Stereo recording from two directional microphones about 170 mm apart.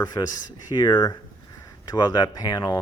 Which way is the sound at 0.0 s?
20° left (ahead or behind).